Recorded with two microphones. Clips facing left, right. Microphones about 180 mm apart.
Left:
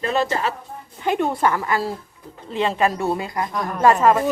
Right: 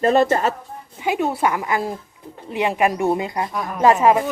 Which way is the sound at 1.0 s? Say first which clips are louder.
Even; 5° right (ahead or behind).